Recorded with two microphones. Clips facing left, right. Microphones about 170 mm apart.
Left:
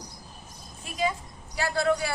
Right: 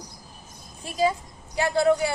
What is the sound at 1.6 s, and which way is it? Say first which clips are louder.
Speech: right 5 dB; 20° right (ahead or behind).